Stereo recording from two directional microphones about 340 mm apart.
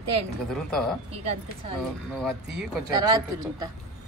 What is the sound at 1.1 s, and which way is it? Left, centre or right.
Speech, centre.